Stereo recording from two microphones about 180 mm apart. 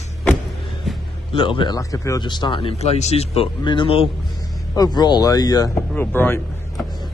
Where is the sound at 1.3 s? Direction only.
25° left (ahead or behind).